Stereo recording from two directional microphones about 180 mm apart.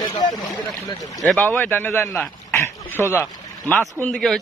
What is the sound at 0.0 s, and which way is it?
Speech, 25° left (ahead or behind).